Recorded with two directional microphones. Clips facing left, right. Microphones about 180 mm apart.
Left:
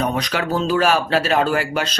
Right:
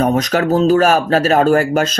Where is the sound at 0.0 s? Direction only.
45° right (ahead or behind).